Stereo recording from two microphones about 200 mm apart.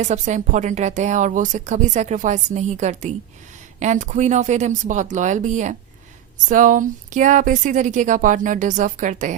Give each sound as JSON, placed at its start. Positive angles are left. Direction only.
{"t": 0.0, "sound": "speech", "side_deg": -35}